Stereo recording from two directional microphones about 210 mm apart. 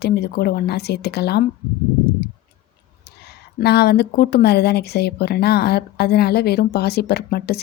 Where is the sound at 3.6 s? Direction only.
50° left (ahead or behind).